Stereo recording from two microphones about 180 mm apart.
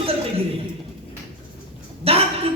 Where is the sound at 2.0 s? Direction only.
35° right (ahead or behind).